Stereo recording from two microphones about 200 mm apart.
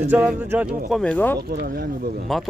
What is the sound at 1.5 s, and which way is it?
Speech, 50° right (ahead or behind).